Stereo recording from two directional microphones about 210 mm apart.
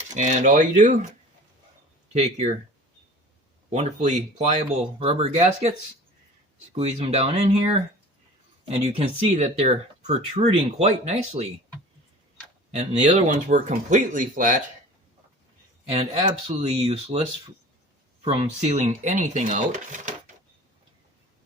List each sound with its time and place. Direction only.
0.1 s speech: 35° right (ahead or behind)
2.1 s speech: 30° right (ahead or behind)
3.7 s speech: 35° right (ahead or behind)
6.7 s speech: 30° right (ahead or behind)
12.7 s speech: 30° right (ahead or behind)
16.0 s speech: 25° right (ahead or behind)